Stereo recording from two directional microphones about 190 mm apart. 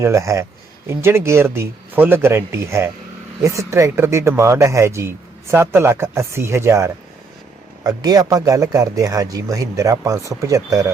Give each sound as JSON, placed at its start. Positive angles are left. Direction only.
{"t": 0.0, "sound": "speech", "side_deg": -15}